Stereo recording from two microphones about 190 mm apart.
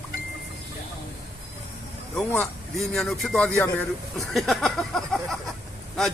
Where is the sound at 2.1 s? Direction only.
5° left (ahead or behind).